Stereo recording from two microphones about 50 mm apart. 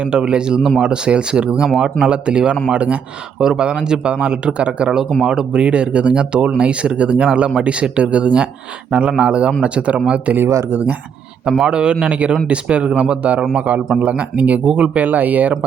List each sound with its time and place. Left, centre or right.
0.0 s speech: centre
3.3 s speech: centre; by 10.9 s right
11.6 s speech: centre